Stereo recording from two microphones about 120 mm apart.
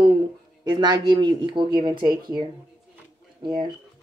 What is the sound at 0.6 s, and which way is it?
A woman's voice, 35° right (ahead or behind).